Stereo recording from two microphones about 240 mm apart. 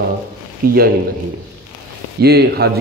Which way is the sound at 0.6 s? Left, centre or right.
Right.